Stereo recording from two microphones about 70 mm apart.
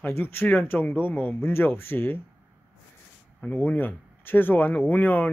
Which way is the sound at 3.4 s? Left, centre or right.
Left.